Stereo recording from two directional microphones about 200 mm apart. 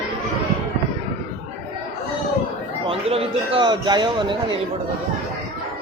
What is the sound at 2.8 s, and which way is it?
Speech, 30° right (ahead or behind).